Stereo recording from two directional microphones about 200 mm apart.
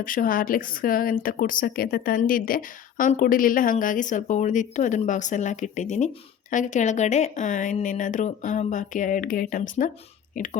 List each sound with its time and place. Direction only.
0.0 s a woman's voice: 45° left (ahead or behind)